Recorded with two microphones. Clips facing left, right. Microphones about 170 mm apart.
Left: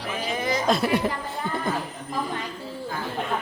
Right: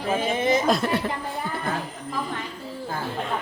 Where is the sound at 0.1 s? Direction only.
25° right (ahead or behind).